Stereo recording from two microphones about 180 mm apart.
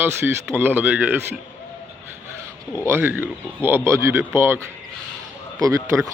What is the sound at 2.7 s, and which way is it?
Speech, 15° right (ahead or behind).